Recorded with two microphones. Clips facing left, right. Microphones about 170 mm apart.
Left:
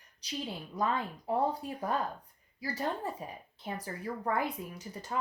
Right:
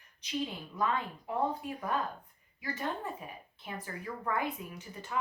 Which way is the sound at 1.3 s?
35° left (ahead or behind).